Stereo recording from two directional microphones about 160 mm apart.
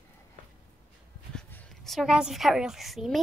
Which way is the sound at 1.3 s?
5° left (ahead or behind).